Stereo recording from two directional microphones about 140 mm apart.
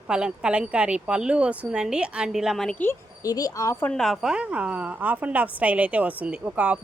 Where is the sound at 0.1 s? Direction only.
5° right (ahead or behind).